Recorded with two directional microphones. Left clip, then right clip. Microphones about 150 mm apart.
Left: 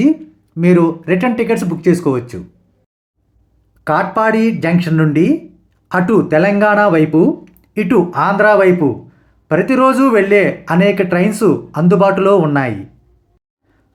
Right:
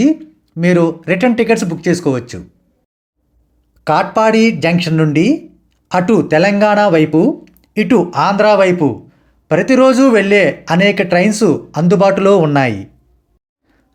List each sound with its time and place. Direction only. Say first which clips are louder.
0.0 s speech: even; 10° right (ahead or behind)
3.8 s speech: right 2 dB; 20° right (ahead or behind)